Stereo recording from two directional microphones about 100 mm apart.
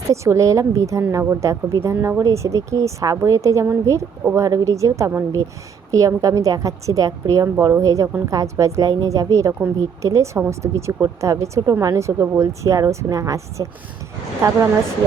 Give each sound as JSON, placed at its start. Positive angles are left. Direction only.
{"t": 0.1, "sound": "speech", "side_deg": -30}